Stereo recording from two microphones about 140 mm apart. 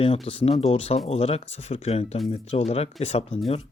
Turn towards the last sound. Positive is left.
turn(degrees=50)  # may be behind; listen again after turning